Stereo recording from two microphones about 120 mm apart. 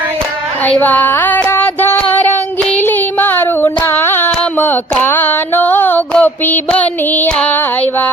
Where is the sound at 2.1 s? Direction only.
15° left (ahead or behind).